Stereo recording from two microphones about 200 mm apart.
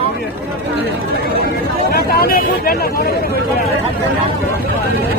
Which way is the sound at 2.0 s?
50° left (ahead or behind).